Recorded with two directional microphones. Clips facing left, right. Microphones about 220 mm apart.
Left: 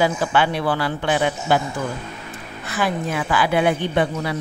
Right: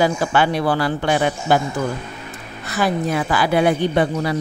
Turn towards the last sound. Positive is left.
turn(degrees=-40)  # may be behind; listen again after turning